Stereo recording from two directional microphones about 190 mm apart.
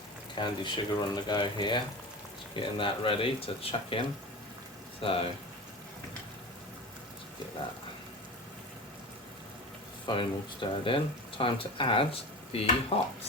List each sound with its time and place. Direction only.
0.3 s speech: 25° left (ahead or behind)
10.1 s speech: 25° left (ahead or behind)
12.5 s stir: 30° left (ahead or behind)